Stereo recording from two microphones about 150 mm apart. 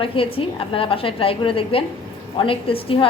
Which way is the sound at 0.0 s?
35° left (ahead or behind).